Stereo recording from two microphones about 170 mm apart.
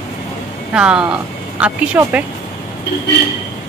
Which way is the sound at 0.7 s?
5° right (ahead or behind).